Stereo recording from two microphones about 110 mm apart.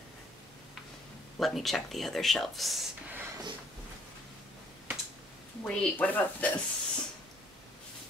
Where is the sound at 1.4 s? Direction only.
Centre (ahead or behind).